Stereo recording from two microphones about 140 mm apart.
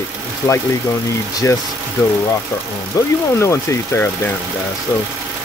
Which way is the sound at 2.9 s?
25° left (ahead or behind).